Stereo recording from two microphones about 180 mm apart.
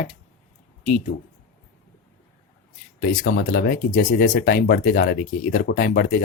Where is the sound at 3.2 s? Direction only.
55° left (ahead or behind).